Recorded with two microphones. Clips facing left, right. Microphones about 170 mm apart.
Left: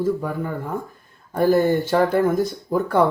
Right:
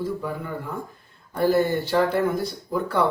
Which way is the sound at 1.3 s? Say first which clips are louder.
Left 3 dB; 50° left (ahead or behind).